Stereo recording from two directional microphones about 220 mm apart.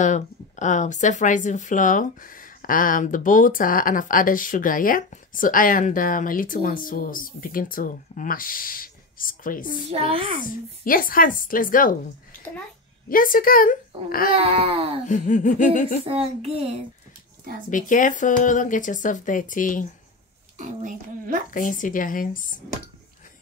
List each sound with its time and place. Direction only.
0.0 s speech: 35° left (ahead or behind)
9.8 s a child's voice: 25° right (ahead or behind)
10.8 s speech: 40° left (ahead or behind)
13.1 s speech: 40° left (ahead or behind)
14.3 s a child's voice: 25° right (ahead or behind)
15.0 s speech: 35° left (ahead or behind)
16.1 s a child's voice: 25° right (ahead or behind)
17.6 s speech: 35° left (ahead or behind)
20.5 s a woman's voice: 35° right (ahead or behind)
21.5 s speech: 40° left (ahead or behind)